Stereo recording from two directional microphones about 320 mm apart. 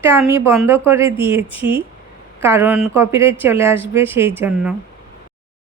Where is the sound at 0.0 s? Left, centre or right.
Centre.